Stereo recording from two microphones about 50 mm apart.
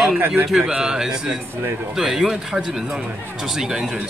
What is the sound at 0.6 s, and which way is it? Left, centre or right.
Speech, centre.